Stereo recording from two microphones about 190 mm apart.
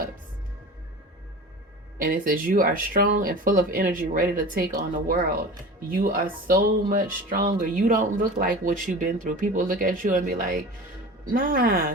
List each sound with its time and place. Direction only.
2.0 s speech: 50° right (ahead or behind)